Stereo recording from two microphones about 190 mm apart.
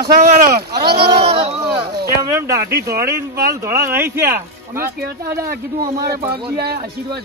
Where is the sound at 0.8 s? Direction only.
55° right (ahead or behind).